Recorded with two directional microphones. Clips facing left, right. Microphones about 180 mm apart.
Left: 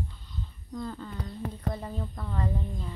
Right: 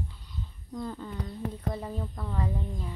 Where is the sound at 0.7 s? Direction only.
10° right (ahead or behind).